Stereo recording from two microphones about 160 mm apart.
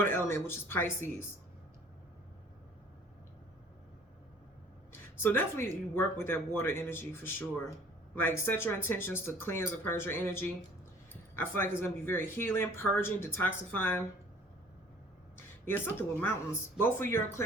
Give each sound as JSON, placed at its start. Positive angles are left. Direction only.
{"t": 0.0, "sound": "speech", "side_deg": 15}
{"t": 4.9, "sound": "a sound", "side_deg": 15}
{"t": 5.9, "sound": "speech", "side_deg": 15}
{"t": 15.6, "sound": "speech", "side_deg": 15}